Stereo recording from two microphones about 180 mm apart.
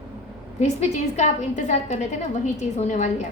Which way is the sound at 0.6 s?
40° left (ahead or behind).